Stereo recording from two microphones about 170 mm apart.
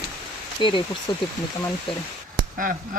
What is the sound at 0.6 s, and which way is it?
Speech, 30° left (ahead or behind).